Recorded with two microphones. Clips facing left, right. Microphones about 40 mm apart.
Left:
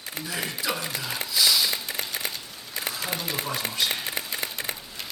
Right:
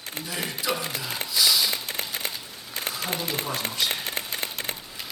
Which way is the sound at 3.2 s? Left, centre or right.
Right.